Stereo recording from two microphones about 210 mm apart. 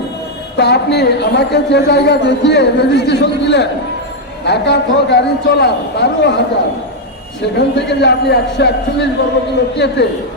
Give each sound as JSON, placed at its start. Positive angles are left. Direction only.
{"t": 0.5, "sound": "a woman's voice", "side_deg": 55}
{"t": 7.5, "sound": "a woman's voice", "side_deg": 55}